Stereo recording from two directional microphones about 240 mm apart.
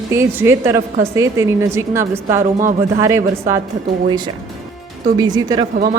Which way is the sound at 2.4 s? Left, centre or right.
Right.